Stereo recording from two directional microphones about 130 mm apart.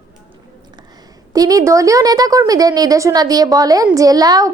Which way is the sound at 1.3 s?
25° right (ahead or behind).